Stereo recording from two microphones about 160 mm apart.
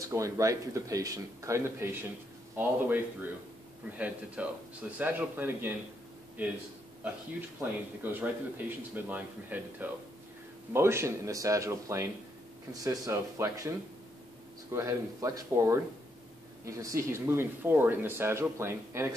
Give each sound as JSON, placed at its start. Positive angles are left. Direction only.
{"t": 0.1, "sound": "speech", "side_deg": -20}
{"t": 8.0, "sound": "speech", "side_deg": -10}